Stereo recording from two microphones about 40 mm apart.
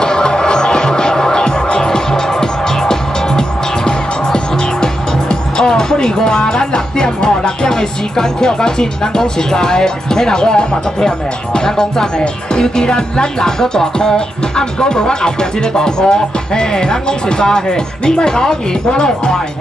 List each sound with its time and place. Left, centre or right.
0.0 s music: centre
5.3 s speech: centre